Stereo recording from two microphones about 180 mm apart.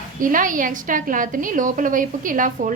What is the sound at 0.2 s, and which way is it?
A woman's voice, 50° right (ahead or behind).